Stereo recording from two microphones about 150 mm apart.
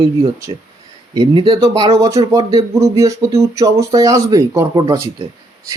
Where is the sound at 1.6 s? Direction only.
25° right (ahead or behind).